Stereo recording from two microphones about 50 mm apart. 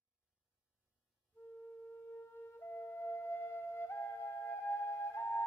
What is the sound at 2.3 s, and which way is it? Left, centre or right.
Flute, left.